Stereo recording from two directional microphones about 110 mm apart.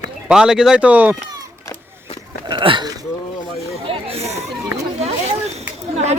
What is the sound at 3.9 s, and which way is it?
Chatter, 65° right (ahead or behind).